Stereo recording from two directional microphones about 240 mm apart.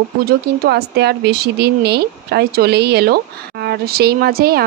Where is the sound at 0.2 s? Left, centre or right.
Right.